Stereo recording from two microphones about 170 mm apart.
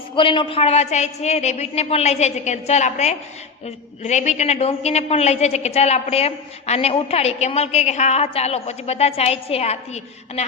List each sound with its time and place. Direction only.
0.2 s a woman's voice: 30° left (ahead or behind)